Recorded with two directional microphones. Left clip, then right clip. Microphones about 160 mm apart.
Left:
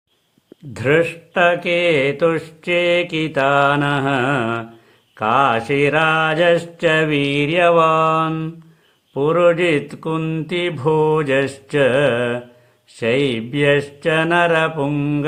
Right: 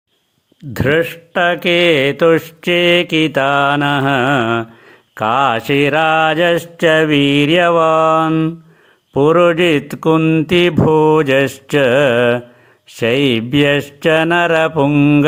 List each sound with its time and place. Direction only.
0.7 s speech: 30° right (ahead or behind)